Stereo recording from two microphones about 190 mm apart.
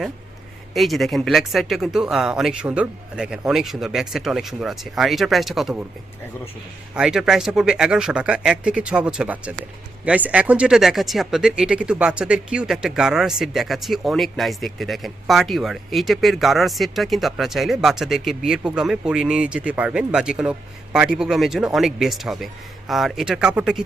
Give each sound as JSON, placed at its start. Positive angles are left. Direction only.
{"t": 0.7, "sound": "speech", "side_deg": 0}
{"t": 6.9, "sound": "speech", "side_deg": -5}